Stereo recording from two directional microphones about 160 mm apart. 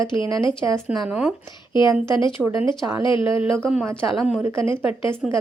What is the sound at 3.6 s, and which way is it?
Speech, centre (ahead or behind).